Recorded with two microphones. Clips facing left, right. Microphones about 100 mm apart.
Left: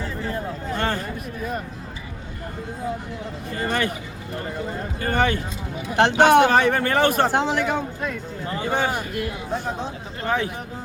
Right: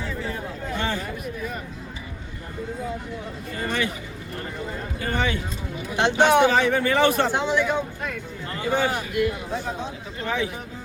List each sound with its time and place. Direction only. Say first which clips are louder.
0.7 s a sound: left 2 dB; 50° left (ahead or behind)
3.6 s speech: left 3 dB; 45° left (ahead or behind)
4.9 s speech: left 4 dB; 50° left (ahead or behind)